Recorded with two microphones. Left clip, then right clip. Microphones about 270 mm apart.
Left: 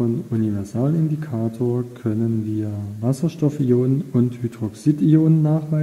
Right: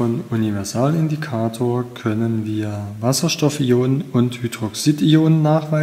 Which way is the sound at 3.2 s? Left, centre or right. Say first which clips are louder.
Right 3 dB; centre.